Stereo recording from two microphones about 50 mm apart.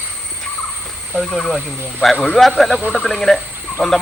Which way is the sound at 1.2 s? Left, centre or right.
Centre.